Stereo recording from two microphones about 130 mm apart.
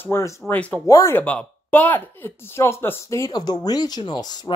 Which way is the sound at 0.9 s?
25° left (ahead or behind).